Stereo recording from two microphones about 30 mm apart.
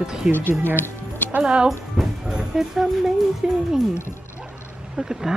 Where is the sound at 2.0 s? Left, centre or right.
Centre.